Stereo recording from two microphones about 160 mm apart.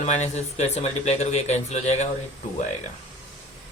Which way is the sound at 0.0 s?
45° left (ahead or behind).